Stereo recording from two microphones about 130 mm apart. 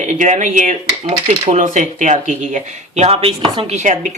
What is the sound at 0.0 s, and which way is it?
Speech, 70° right (ahead or behind).